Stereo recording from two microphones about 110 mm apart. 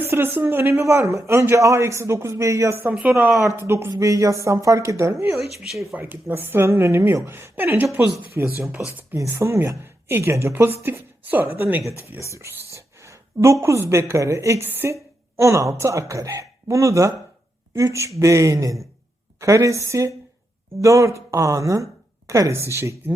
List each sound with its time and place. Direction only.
0.0 s a man's voice: 20° right (ahead or behind)
5.5 s speech: centre (ahead or behind)
6.0 s a man's voice: 15° right (ahead or behind)